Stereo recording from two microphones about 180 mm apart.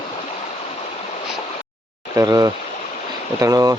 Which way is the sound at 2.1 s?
20° right (ahead or behind).